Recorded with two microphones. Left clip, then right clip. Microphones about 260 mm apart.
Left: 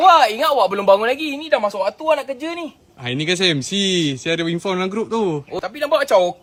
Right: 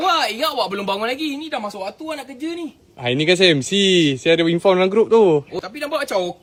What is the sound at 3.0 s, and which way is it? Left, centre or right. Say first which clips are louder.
A man's voice: right 4 dB; right.